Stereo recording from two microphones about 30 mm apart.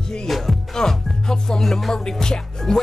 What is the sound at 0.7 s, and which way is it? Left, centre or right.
Music, centre.